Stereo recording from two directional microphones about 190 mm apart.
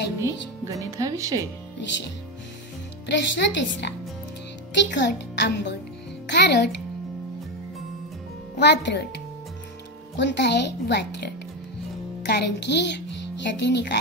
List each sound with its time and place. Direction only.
0.2 s speech: 15° right (ahead or behind)
3.1 s a woman's voice: 70° left (ahead or behind)
4.9 s a woman's voice: 65° left (ahead or behind)
8.5 s speech: 65° left (ahead or behind)
10.1 s a woman's voice: 65° left (ahead or behind)